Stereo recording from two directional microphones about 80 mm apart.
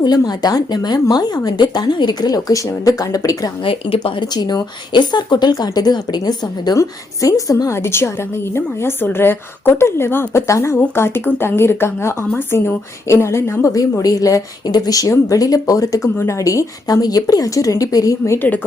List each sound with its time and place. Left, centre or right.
0.0 s speech: left
2.5 s a woman's voice: left
3.6 s speech: left
6.7 s a woman's voice: left
18.3 s a woman's voice: left